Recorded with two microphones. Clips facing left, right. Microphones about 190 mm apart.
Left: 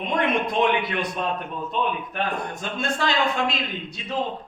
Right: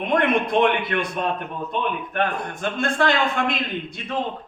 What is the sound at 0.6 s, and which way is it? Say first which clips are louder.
Speech: right 3 dB; 60° right (ahead or behind).